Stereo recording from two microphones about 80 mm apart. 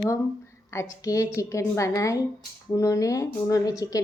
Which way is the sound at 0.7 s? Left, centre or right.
Left.